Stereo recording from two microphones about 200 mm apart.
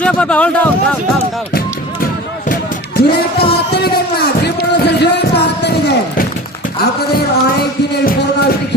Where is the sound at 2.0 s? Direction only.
45° left (ahead or behind).